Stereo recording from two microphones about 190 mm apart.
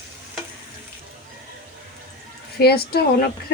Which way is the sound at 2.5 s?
55° left (ahead or behind).